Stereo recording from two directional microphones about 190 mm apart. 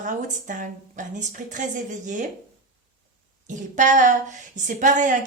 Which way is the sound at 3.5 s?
40° right (ahead or behind).